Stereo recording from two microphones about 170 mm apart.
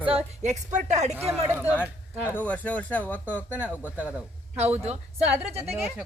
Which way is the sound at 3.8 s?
10° right (ahead or behind).